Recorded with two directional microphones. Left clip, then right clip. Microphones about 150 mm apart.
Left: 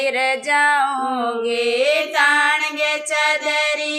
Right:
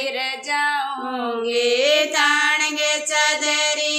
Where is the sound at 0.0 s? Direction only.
40° left (ahead or behind).